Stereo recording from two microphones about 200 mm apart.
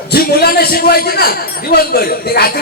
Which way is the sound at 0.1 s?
50° left (ahead or behind).